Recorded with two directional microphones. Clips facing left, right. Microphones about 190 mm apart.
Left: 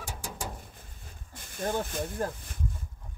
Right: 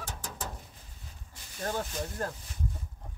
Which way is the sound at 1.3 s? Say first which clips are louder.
Left 5 dB; 50° left (ahead or behind).